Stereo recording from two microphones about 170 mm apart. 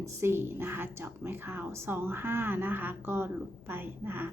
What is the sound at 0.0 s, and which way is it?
A woman's voice, 15° right (ahead or behind).